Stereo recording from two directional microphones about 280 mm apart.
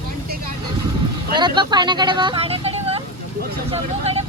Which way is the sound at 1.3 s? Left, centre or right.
Centre.